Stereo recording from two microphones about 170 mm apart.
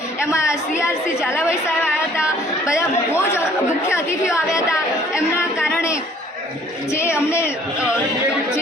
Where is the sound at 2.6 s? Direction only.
15° left (ahead or behind).